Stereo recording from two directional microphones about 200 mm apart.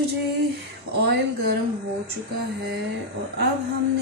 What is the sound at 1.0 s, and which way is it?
Speech, 55° right (ahead or behind).